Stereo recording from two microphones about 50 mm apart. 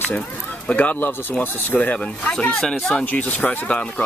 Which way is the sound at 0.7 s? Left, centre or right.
Left.